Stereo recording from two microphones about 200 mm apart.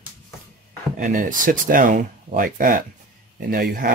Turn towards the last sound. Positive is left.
turn(degrees=-50)  # may be behind; listen again after turning